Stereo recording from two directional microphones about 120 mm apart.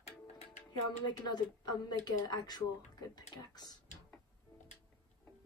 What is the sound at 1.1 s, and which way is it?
Speech, 35° left (ahead or behind).